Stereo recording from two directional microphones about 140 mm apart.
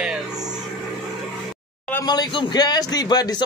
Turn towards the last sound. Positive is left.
turn(degrees=30)  # may be behind; listen again after turning